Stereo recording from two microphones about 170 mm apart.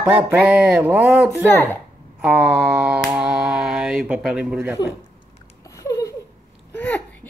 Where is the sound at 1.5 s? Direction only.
10° left (ahead or behind).